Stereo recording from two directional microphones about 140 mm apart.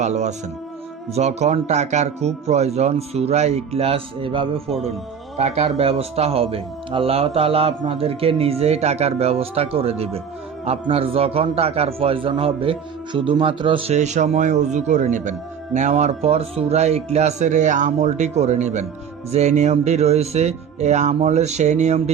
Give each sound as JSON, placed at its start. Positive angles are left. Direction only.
{"t": 0.0, "sound": "a man's voice", "side_deg": -55}
{"t": 13.9, "sound": "a man's voice", "side_deg": -55}